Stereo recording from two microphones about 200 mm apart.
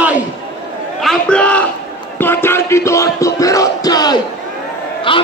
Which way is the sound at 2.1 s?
10° left (ahead or behind).